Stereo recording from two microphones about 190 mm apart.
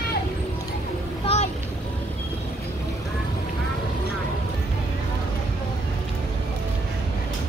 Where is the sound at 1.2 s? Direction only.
35° left (ahead or behind).